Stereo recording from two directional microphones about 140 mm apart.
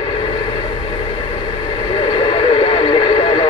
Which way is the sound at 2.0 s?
35° left (ahead or behind).